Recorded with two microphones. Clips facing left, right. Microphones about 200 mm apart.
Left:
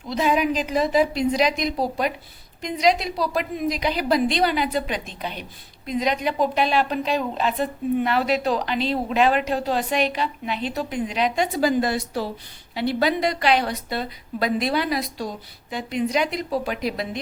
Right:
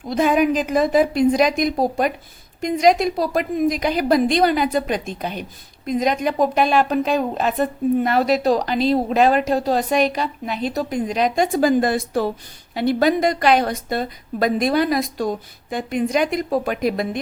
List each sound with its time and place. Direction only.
0.1 s a woman's voice: 50° right (ahead or behind)